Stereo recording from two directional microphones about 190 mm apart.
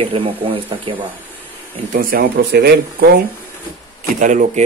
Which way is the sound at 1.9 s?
55° right (ahead or behind).